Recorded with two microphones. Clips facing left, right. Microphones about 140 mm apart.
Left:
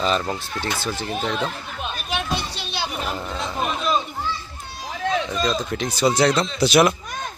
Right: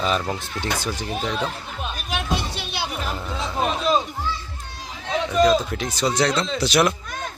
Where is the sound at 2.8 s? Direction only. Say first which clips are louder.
Left 2 dB; centre (ahead or behind).